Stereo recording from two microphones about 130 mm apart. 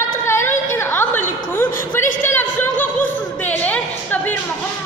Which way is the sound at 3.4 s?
10° left (ahead or behind).